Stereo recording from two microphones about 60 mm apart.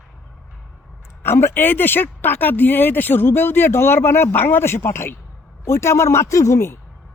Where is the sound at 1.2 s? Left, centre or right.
Left.